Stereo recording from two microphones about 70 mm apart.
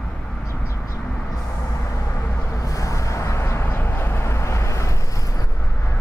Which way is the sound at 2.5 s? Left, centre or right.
Left.